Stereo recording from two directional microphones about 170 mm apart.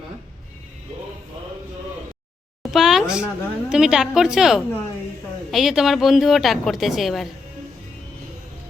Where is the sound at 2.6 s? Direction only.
Centre (ahead or behind).